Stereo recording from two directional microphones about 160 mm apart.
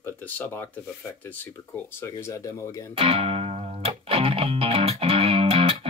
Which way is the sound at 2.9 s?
40° right (ahead or behind).